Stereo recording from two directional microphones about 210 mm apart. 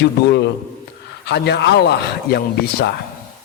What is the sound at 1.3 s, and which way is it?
A man's voice, 55° left (ahead or behind).